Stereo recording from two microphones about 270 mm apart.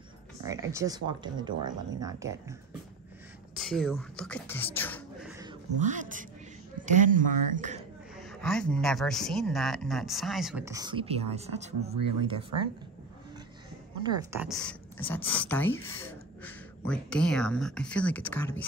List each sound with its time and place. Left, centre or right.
0.4 s speech: centre
3.5 s speech: centre
5.8 s speech: right
8.2 s speech: centre; by 12.4 s right
14.0 s speech: centre